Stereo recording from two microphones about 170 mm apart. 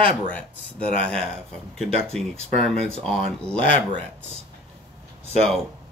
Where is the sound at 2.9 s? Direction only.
35° right (ahead or behind).